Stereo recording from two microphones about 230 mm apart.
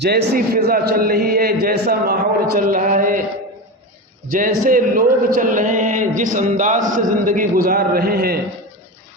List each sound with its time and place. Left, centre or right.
0.0 s a man's voice: right
4.3 s a man's voice: right